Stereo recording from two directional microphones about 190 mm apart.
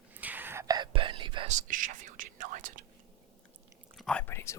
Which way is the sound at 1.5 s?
45° right (ahead or behind).